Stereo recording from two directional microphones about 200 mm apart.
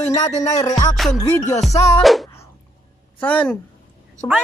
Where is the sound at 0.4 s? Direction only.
20° left (ahead or behind).